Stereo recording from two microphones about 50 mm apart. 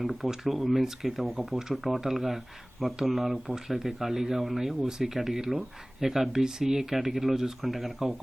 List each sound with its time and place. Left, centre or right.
0.0 s speech: centre